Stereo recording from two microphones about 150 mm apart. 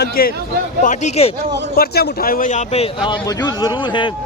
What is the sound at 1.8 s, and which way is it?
Speech, 90° left.